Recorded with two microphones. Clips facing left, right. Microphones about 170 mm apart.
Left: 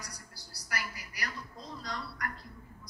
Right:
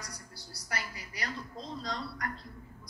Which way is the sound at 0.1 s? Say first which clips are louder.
Right 3 dB; 60° right (ahead or behind).